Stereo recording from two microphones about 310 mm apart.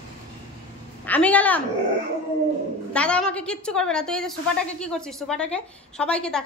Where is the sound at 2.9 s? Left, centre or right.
Centre.